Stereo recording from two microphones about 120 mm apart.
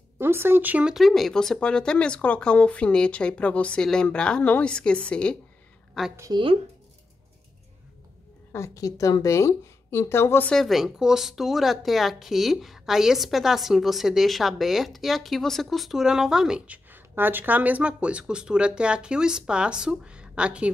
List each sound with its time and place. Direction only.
0.2 s speech: 20° right (ahead or behind)
0.9 s a woman's voice: centre (ahead or behind)
6.3 s speech: 45° right (ahead or behind)
8.5 s a woman's voice: 25° left (ahead or behind)
10.5 s speech: centre (ahead or behind)